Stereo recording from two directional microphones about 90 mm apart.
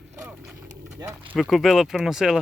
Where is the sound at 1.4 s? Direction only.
Centre (ahead or behind).